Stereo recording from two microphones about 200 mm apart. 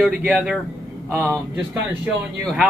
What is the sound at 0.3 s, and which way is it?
Speech, centre (ahead or behind).